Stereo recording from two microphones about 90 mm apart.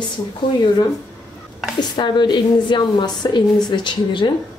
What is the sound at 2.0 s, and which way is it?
A woman's voice, 55° left (ahead or behind).